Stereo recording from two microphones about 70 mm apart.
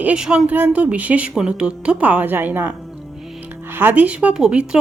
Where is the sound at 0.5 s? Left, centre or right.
Right.